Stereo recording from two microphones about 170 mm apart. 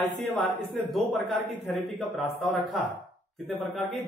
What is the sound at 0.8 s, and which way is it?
Speech, centre (ahead or behind).